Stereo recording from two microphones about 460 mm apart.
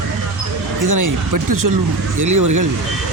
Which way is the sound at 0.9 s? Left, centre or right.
Right.